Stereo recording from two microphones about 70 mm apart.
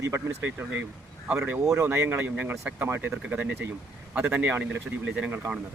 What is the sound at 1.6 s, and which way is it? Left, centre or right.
Speech, right.